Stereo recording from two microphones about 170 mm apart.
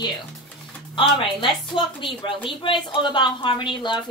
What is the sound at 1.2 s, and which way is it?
A woman's voice, 30° left (ahead or behind).